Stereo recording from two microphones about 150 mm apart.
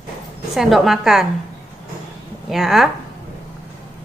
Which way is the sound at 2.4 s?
Centre (ahead or behind).